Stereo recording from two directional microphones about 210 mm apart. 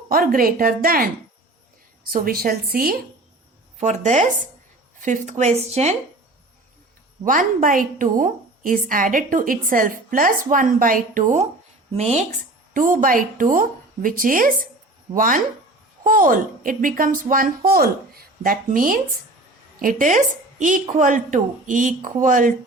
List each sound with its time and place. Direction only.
0.1 s speech: 45° right (ahead or behind)
3.8 s speech: 35° right (ahead or behind)
7.3 s a woman's voice: 40° right (ahead or behind)